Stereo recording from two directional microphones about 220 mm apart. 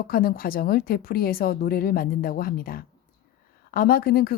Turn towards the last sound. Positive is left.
turn(degrees=45)  # may be behind; listen again after turning